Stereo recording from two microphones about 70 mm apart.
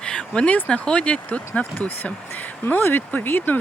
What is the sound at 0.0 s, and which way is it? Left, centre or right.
Speech, centre.